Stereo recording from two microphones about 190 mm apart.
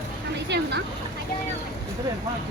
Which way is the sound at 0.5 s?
65° right (ahead or behind).